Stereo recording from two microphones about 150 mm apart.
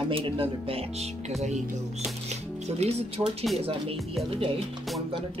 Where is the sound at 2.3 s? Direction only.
45° right (ahead or behind).